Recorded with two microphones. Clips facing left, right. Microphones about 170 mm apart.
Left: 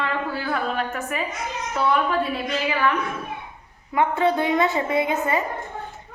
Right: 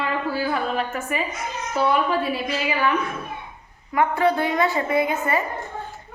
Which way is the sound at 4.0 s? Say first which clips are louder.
Even; 20° left (ahead or behind).